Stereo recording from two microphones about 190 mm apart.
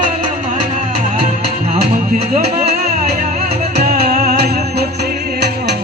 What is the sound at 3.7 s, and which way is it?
Music, 50° right (ahead or behind).